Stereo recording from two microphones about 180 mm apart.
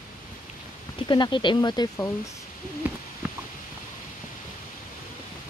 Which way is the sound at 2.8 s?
10° right (ahead or behind).